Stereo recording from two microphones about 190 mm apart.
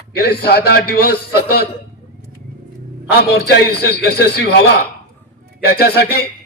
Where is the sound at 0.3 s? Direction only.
55° left (ahead or behind).